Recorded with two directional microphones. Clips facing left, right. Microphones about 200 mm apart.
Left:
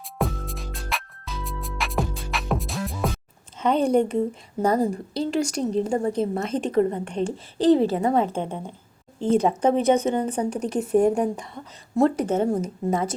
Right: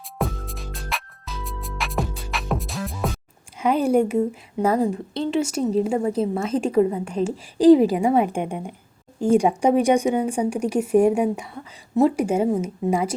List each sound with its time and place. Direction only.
0.2 s music: centre (ahead or behind)
3.6 s a woman's voice: 10° right (ahead or behind)